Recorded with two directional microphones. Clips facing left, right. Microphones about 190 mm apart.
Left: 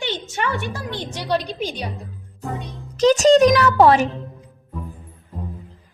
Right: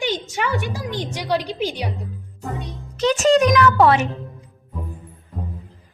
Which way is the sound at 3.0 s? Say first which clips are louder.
Left 3 dB; 35° left (ahead or behind).